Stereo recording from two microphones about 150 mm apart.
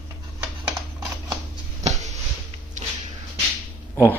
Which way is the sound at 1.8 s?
50° right (ahead or behind).